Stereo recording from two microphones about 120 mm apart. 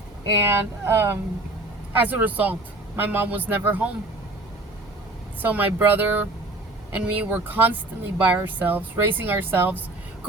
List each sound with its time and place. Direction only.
0.4 s a man's voice: 20° right (ahead or behind)
5.4 s a man's voice: 15° right (ahead or behind)